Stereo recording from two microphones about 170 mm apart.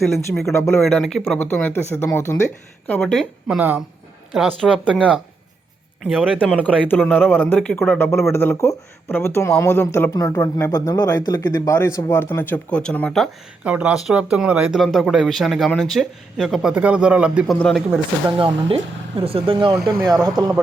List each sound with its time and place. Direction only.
0.5 s speech: 15° left (ahead or behind)
0.8 s speech: centre (ahead or behind)
18.3 s speech: 30° right (ahead or behind)